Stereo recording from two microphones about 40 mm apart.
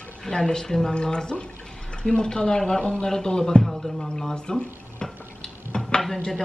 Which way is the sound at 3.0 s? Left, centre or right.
Centre.